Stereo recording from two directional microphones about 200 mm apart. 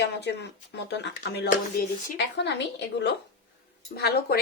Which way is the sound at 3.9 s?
55° left (ahead or behind).